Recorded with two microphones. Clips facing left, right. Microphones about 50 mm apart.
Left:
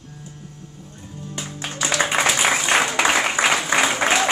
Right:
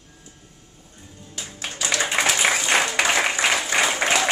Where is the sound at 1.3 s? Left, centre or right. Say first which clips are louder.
Left 4 dB; centre.